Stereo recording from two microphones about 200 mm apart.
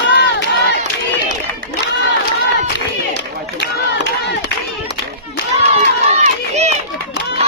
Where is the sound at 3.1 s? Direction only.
60° left (ahead or behind).